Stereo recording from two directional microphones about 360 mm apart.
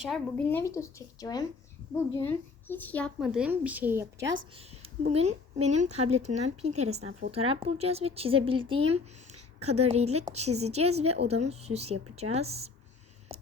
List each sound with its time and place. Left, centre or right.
0.0 s a woman's voice: centre
4.4 s a woman's voice: centre